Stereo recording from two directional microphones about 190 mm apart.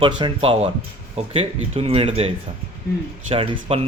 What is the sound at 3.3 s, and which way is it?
Speech, 30° right (ahead or behind).